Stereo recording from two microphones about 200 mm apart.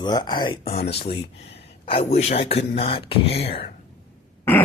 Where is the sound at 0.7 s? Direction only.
55° left (ahead or behind).